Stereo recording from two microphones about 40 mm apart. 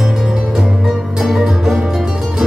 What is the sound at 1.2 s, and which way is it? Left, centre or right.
Music, centre.